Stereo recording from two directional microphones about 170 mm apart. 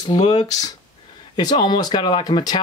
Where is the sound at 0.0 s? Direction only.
25° left (ahead or behind).